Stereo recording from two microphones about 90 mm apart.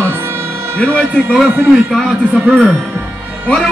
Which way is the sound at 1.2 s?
10° left (ahead or behind).